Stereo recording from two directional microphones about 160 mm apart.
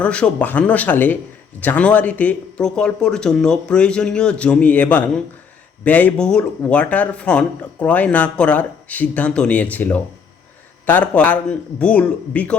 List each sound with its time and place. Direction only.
0.0 s speech: 10° left (ahead or behind)